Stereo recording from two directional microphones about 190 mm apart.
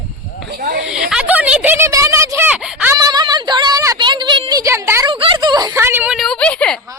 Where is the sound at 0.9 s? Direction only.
5° right (ahead or behind).